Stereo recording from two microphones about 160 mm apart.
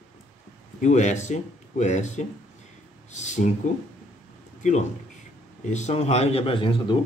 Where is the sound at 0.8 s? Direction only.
45° left (ahead or behind).